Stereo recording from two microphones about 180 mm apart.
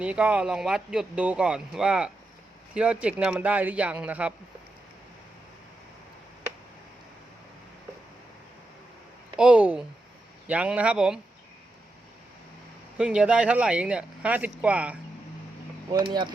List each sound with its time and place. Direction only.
0.0 s speech: 5° right (ahead or behind)
9.3 s speech: 5° right (ahead or behind)
13.0 s speech: 5° right (ahead or behind)
15.9 s speech: 25° right (ahead or behind)